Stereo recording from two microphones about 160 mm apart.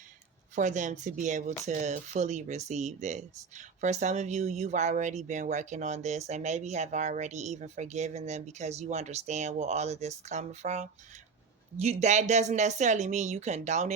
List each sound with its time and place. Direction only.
0.5 s speech: 50° right (ahead or behind)